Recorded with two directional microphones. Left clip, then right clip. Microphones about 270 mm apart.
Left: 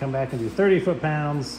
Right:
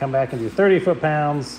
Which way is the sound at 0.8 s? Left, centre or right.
Right.